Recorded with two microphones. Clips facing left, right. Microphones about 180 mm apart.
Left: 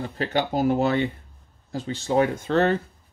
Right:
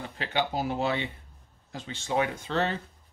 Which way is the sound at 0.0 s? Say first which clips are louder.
Left 5 dB; 40° left (ahead or behind).